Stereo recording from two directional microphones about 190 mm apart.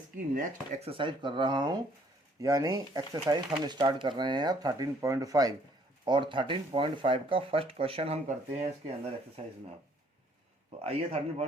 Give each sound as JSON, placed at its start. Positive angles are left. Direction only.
{"t": 0.3, "sound": "speech", "side_deg": -30}
{"t": 10.8, "sound": "a man's voice", "side_deg": -35}